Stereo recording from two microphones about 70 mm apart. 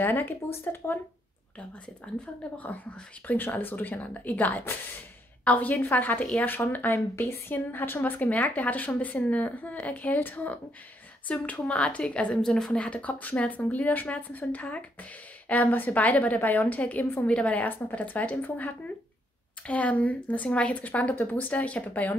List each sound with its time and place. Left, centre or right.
0.0 s speech: left
2.5 s a woman's voice: left
17.3 s a woman's voice: centre